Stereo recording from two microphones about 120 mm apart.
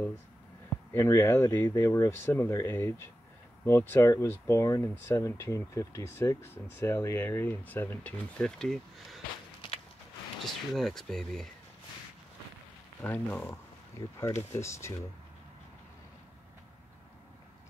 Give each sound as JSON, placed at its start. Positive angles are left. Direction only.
{"t": 0.9, "sound": "speech", "side_deg": 25}
{"t": 10.4, "sound": "speech", "side_deg": 0}
{"t": 13.0, "sound": "speech", "side_deg": 15}